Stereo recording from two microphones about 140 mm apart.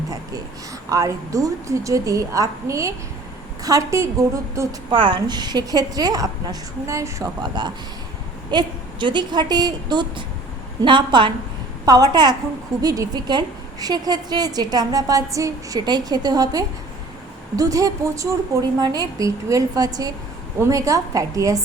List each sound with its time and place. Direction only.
0.9 s a woman's voice: 25° right (ahead or behind)
4.9 s a woman's voice: 35° right (ahead or behind)